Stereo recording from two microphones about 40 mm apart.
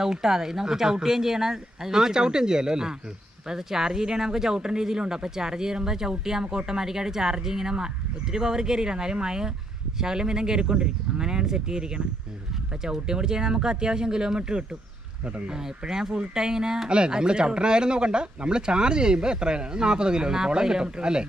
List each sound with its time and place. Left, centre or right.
0.0 s speech: centre
15.6 s speech: centre